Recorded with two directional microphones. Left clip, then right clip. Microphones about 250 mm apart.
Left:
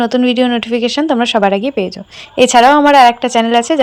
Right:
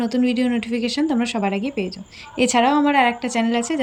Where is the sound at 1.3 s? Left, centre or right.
Left.